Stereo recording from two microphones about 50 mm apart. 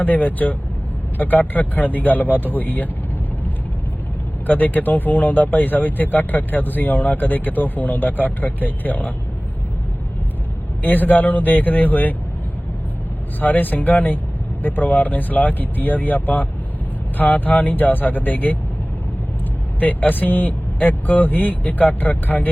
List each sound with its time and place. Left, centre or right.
0.0 s speech: left
4.4 s speech: left
10.8 s speech: left
13.4 s speech: left
19.8 s speech: left